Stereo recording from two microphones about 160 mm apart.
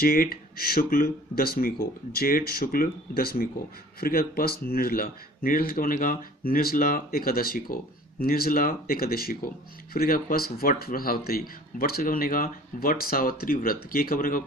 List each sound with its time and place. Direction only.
0.0 s speech: 65° left (ahead or behind)